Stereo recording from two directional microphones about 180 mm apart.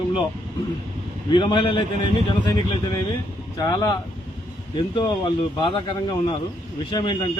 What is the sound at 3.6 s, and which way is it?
Speech, 25° left (ahead or behind).